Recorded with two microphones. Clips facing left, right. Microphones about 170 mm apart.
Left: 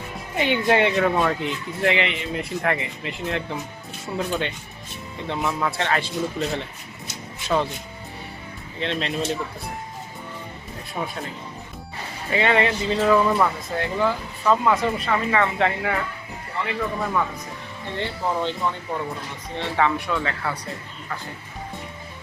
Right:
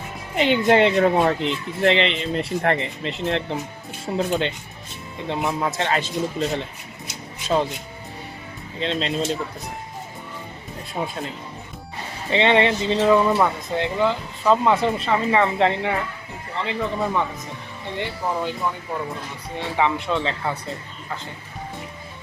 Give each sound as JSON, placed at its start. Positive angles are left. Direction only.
{"t": 0.3, "sound": "speech", "side_deg": -20}
{"t": 7.4, "sound": "speech", "side_deg": -15}
{"t": 8.8, "sound": "speech", "side_deg": -25}
{"t": 10.9, "sound": "speech", "side_deg": -25}
{"t": 12.3, "sound": "speech", "side_deg": -25}
{"t": 14.8, "sound": "speech", "side_deg": 0}
{"t": 15.1, "sound": "speech", "side_deg": -30}
{"t": 19.5, "sound": "speech", "side_deg": -15}